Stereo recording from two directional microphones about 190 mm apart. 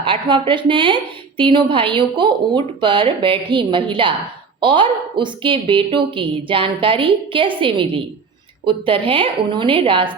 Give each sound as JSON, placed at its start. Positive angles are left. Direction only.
{"t": 0.0, "sound": "a woman's voice", "side_deg": -25}